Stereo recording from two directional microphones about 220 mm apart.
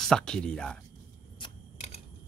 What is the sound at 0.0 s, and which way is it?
Speech, 5° left (ahead or behind).